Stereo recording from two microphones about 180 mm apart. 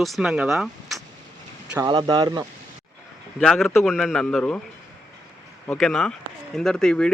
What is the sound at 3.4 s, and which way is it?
Speech, centre (ahead or behind).